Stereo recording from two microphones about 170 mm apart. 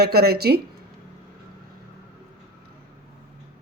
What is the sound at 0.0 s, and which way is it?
Speech, 70° right (ahead or behind).